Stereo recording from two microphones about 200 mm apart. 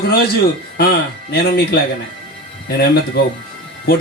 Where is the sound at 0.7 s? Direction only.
50° left (ahead or behind).